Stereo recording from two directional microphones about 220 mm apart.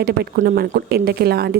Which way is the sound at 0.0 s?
45° right (ahead or behind).